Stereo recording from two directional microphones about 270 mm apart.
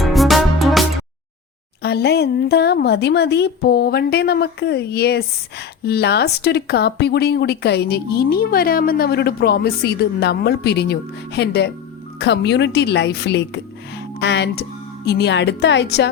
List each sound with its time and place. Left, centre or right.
0.0 s music: centre
1.8 s a woman's voice: left